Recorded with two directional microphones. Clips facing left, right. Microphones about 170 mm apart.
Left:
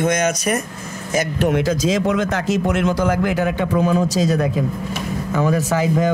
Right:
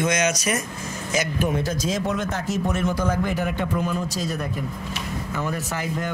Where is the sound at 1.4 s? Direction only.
85° left.